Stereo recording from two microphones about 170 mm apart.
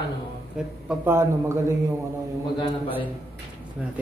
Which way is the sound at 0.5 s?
10° right (ahead or behind).